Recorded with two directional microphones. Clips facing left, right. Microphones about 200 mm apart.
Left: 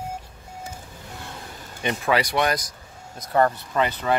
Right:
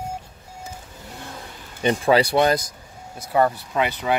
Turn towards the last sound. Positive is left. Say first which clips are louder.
# even
turn(degrees=-10)  # may be behind; listen again after turning